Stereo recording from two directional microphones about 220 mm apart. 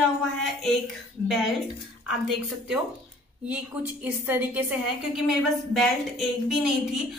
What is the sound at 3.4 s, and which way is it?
A woman's voice, 5° right (ahead or behind).